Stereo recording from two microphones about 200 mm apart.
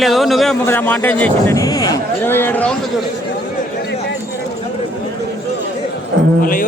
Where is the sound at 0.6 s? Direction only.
10° left (ahead or behind).